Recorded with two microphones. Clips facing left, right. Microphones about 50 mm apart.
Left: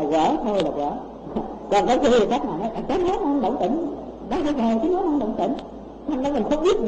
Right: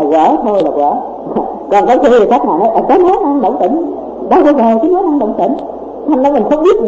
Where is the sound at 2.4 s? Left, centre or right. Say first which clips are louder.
Right 16 dB; right.